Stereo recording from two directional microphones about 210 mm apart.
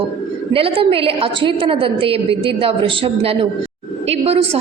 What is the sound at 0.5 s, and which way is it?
A woman's voice, 25° right (ahead or behind).